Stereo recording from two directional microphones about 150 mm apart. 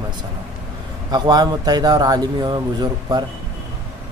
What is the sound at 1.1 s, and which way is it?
A man's voice, 25° right (ahead or behind).